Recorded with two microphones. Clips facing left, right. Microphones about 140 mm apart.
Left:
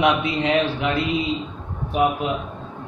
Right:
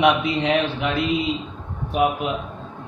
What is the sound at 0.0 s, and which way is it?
A man's voice, centre (ahead or behind).